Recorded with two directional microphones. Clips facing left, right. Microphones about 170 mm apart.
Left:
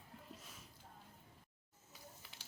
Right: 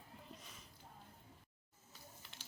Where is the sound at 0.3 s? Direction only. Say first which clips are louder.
Left 1 dB; 5° left (ahead or behind).